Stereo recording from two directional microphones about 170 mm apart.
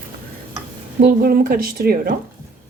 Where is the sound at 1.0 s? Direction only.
60° right (ahead or behind).